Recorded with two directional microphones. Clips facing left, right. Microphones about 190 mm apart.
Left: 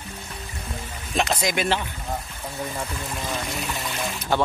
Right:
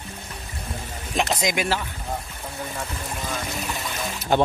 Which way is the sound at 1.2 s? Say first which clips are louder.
Even; 15° right (ahead or behind).